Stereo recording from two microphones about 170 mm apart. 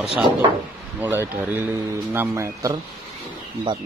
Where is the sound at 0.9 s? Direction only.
10° right (ahead or behind).